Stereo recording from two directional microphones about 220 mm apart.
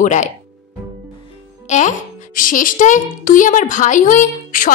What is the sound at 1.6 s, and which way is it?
A woman's voice, 35° left (ahead or behind).